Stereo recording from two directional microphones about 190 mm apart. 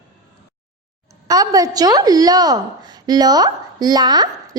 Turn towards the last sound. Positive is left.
turn(degrees=-20)  # may be behind; listen again after turning